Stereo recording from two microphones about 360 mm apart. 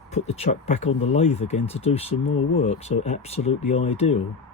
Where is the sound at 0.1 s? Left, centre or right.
Centre.